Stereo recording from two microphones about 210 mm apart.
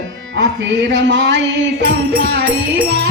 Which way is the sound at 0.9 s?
60° right (ahead or behind).